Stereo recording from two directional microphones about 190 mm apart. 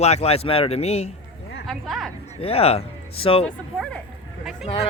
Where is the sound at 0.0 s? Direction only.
35° left (ahead or behind).